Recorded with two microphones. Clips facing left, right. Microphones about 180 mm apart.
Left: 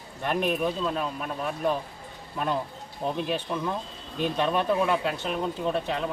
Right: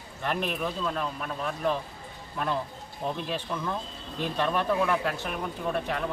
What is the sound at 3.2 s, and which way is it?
Speech, 15° left (ahead or behind).